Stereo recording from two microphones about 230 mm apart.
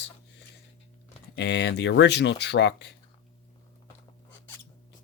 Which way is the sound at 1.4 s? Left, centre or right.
Left.